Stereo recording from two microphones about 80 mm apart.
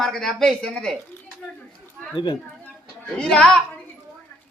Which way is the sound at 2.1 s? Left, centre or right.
Left.